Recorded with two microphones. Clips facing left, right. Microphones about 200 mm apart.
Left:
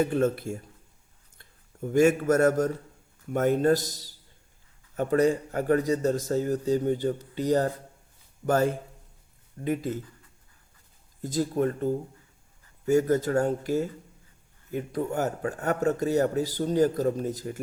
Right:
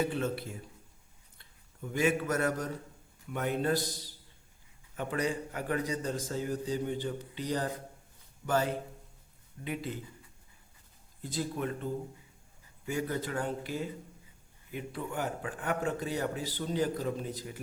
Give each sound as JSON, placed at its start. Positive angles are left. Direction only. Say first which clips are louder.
{"t": 0.0, "sound": "a man's voice", "louder": "left 7 dB", "side_deg": 45}
{"t": 11.2, "sound": "speech", "louder": "left 9 dB", "side_deg": 45}